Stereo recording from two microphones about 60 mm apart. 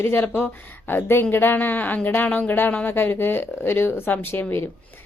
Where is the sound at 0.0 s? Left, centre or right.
Left.